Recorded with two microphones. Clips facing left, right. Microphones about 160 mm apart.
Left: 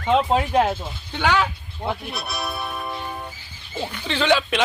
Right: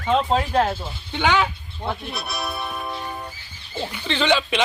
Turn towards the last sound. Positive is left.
turn(degrees=5)  # may be behind; listen again after turning